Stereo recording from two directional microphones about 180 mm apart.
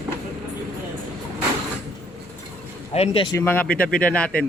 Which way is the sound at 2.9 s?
30° left (ahead or behind).